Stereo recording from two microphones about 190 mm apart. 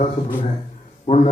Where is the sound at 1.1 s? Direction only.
40° left (ahead or behind).